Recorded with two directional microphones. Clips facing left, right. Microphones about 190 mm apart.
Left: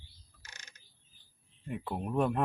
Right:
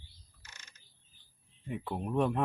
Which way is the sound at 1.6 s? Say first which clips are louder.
Even; 5° left (ahead or behind).